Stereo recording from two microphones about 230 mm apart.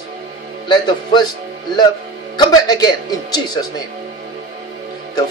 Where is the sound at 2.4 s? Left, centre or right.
Centre.